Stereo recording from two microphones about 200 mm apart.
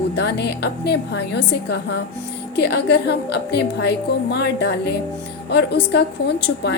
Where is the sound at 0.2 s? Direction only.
55° left (ahead or behind).